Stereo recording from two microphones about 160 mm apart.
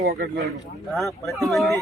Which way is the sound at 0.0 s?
70° right (ahead or behind).